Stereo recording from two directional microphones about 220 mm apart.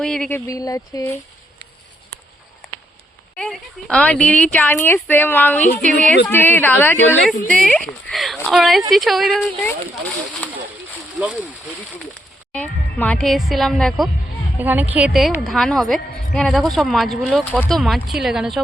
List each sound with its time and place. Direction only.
0.0 s speech: 5° left (ahead or behind)
3.3 s a woman's voice: 5° left (ahead or behind)
10.4 s a sound: 5° left (ahead or behind)
12.5 s a woman's voice: 5° left (ahead or behind)